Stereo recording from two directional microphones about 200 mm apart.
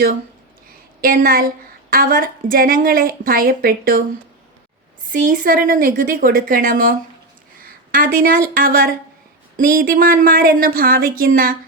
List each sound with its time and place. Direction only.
1.0 s a woman's voice: 45° right (ahead or behind)
5.0 s a woman's voice: 40° right (ahead or behind)
7.6 s a sound: 45° right (ahead or behind)
8.5 s a woman's voice: 45° right (ahead or behind)